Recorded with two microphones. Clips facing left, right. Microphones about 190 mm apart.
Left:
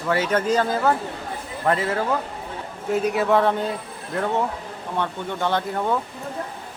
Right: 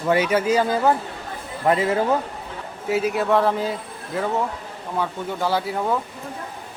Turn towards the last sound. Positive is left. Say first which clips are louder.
# even
turn(degrees=-5)  # may be behind; listen again after turning